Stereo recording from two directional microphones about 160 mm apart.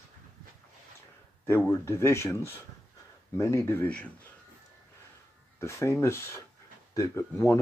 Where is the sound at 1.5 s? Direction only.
15° left (ahead or behind).